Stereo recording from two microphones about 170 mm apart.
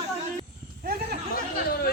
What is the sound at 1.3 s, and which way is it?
Speech, 65° left (ahead or behind).